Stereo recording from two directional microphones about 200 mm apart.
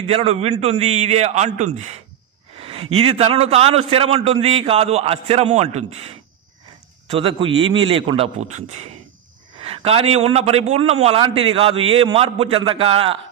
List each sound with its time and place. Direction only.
0.1 s a man's voice: 30° right (ahead or behind)